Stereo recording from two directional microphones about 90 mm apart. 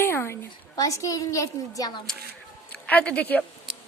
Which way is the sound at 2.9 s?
15° left (ahead or behind).